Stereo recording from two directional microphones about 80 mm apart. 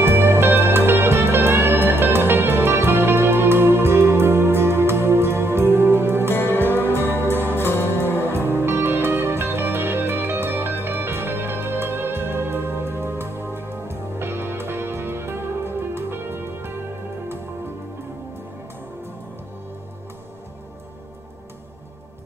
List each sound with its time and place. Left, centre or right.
0.0 s music: right
6.3 s music: left
6.7 s music: right
7.5 s music: left
8.3 s music: right